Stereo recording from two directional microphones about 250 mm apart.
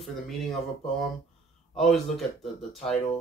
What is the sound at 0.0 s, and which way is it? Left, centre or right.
Speech, centre.